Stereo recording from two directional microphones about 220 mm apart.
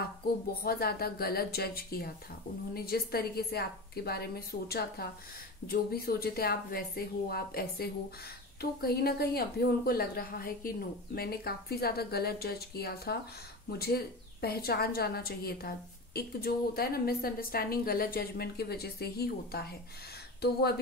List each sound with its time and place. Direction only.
0.7 s a woman's voice: 45° left (ahead or behind)